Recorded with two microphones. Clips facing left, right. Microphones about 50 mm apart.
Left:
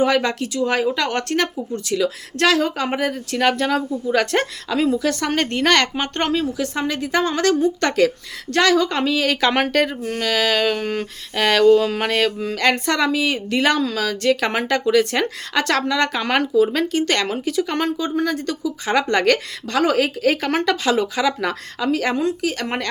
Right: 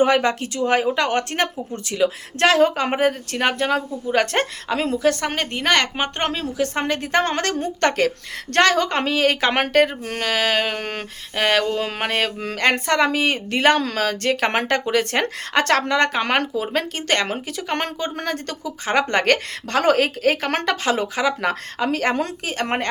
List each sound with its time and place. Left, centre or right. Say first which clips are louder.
0.0 s speech: right 1 dB; right
5.4 s a woman's voice: left 5 dB; centre
6.3 s a woman's voice: left 1 dB; right
10.8 s a woman's voice: left 4 dB; right
11.3 s a woman's voice: left 6 dB; centre
13.1 s a woman's voice: left 1 dB; right
17.8 s a woman's voice: left 5 dB; right
21.9 s a woman's voice: left 3 dB; right